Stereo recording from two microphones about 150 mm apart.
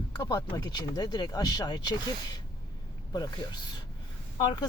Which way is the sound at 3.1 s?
25° left (ahead or behind).